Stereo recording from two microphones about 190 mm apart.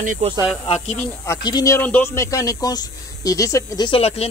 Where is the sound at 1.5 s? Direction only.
20° left (ahead or behind).